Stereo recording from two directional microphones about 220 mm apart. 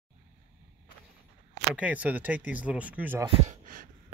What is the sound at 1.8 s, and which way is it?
Speech, 5° right (ahead or behind).